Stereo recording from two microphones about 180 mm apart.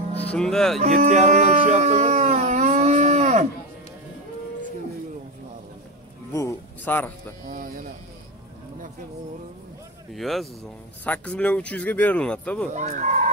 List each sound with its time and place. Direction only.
0.2 s speech: 5° left (ahead or behind)
0.7 s a sound: 35° right (ahead or behind)
6.3 s music: 15° left (ahead or behind)
7.4 s speech: 50° right (ahead or behind)
10.1 s speech: centre (ahead or behind)
12.7 s fowl: 40° right (ahead or behind)